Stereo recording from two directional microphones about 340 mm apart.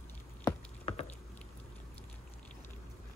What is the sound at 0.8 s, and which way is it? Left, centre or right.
Rowboat, centre.